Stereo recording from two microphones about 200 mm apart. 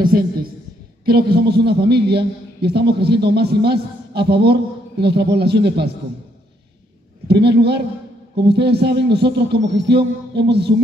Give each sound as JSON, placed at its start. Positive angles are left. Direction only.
{"t": 0.0, "sound": "a woman's voice", "side_deg": -45}
{"t": 7.2, "sound": "a man's voice", "side_deg": -55}